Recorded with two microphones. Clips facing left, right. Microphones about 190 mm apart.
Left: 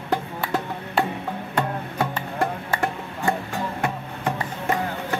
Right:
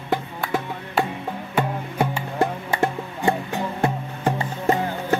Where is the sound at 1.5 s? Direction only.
10° right (ahead or behind).